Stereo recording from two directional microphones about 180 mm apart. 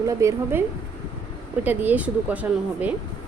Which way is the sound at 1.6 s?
10° right (ahead or behind).